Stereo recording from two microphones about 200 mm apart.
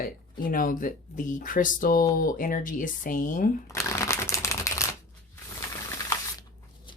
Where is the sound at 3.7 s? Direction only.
15° left (ahead or behind).